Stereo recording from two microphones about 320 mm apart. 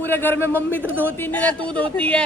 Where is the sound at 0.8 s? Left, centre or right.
Centre.